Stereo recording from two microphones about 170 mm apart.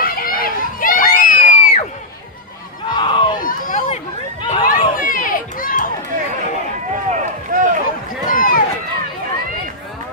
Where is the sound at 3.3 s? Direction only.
55° left (ahead or behind).